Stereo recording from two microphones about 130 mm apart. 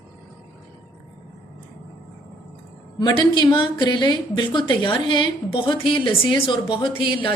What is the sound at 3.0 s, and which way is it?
A woman's voice, 35° left (ahead or behind).